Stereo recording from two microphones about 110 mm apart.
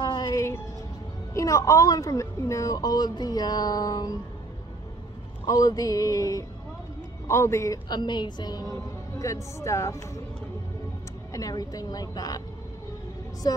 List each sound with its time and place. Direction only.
0.0 s music: 40° left (ahead or behind)
1.3 s a woman's voice: 30° left (ahead or behind)
5.5 s a woman's voice: 35° left (ahead or behind)
7.9 s a woman's voice: 45° left (ahead or behind)
9.2 s speech: 30° left (ahead or behind)
11.3 s a woman's voice: 35° left (ahead or behind)